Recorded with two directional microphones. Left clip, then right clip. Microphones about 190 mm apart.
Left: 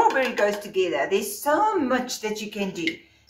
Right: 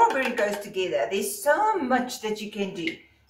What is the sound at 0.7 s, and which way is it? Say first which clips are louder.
A woman's voice: left 3 dB; 15° left (ahead or behind).